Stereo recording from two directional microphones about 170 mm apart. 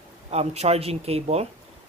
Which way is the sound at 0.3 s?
40° right (ahead or behind).